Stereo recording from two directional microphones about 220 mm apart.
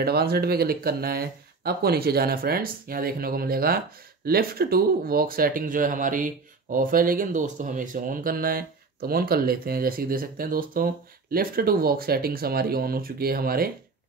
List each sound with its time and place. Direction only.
0.0 s speech: 45° right (ahead or behind)